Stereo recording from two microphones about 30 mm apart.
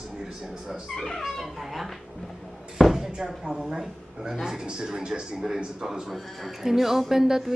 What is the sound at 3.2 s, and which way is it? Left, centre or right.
A man's voice, centre.